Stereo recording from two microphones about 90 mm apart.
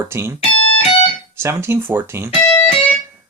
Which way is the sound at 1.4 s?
30° right (ahead or behind).